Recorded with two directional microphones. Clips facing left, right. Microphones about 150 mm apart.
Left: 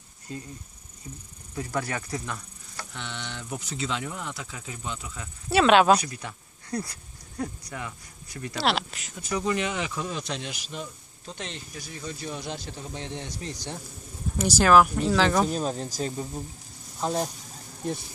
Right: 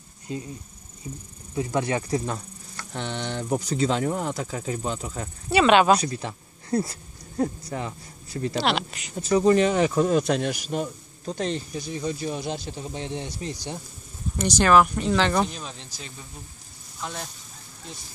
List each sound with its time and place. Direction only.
1.5 s speech: 20° right (ahead or behind)
2.9 s a man's voice: 40° right (ahead or behind)
5.5 s speech: centre (ahead or behind)
5.9 s speech: 30° right (ahead or behind)
8.5 s speech: centre (ahead or behind)
9.3 s a man's voice: 35° right (ahead or behind)
11.8 s speech: 20° right (ahead or behind)
14.4 s speech: 5° left (ahead or behind)
15.5 s speech: 40° left (ahead or behind)